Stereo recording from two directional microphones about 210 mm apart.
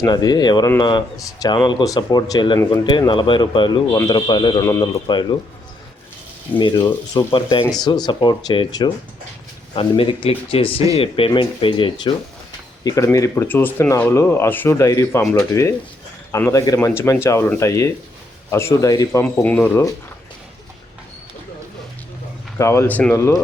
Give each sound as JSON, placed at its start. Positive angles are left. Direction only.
{"t": 0.0, "sound": "speech", "side_deg": 20}
{"t": 6.6, "sound": "speech", "side_deg": 20}
{"t": 22.5, "sound": "speech", "side_deg": 15}